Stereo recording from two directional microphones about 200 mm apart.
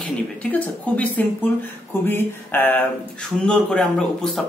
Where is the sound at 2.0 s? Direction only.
10° left (ahead or behind).